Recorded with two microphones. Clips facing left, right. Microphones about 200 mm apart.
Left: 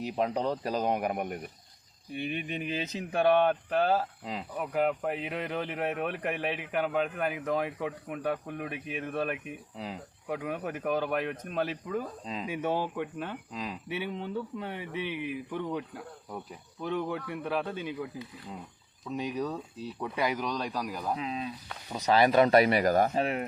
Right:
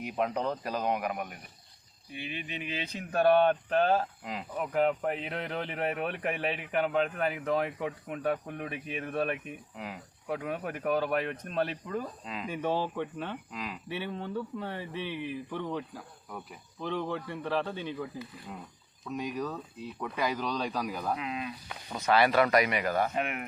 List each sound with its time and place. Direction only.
0.6 s speech: 35° left (ahead or behind)
1.1 s speech: 55° left (ahead or behind)
3.2 s speech: 10° left (ahead or behind)
9.7 s speech: 30° left (ahead or behind)
10.2 s speech: 5° left (ahead or behind)
12.2 s speech: 30° left (ahead or behind)
12.5 s speech: 10° left (ahead or behind)
13.5 s speech: 25° left (ahead or behind)
13.8 s speech: 10° left (ahead or behind)
20.7 s speech: centre (ahead or behind)
21.2 s speech: 30° left (ahead or behind)
21.8 s speech: 15° left (ahead or behind); by 23.5 s 30° left (ahead or behind)